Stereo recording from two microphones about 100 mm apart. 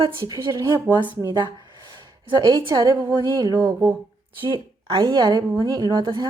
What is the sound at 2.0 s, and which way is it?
A woman's voice, 45° right (ahead or behind).